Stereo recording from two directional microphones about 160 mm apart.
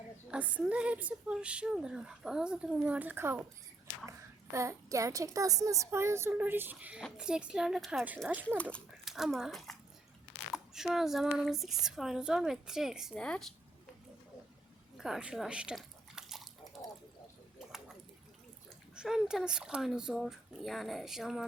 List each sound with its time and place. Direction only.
0.3 s a woman's voice: 10° right (ahead or behind)
4.5 s a child's voice: 20° right (ahead or behind); by 13.5 s 5° left (ahead or behind)
14.9 s drip: centre (ahead or behind)
18.9 s speech: 5° right (ahead or behind)